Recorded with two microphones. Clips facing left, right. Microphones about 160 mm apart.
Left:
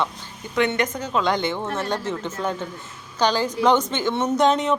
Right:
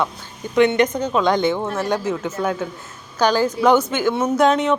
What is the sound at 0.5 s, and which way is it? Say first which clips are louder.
A woman's voice: right 6 dB; 20° right (ahead or behind).